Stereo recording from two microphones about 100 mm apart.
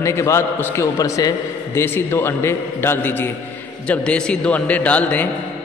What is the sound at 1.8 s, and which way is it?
A man's voice, 25° left (ahead or behind).